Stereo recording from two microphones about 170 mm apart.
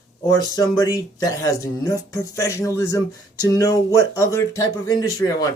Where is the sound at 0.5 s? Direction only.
20° left (ahead or behind).